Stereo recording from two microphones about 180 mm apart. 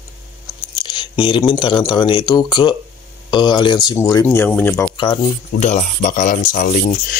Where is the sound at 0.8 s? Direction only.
25° left (ahead or behind); by 4.8 s 10° left (ahead or behind).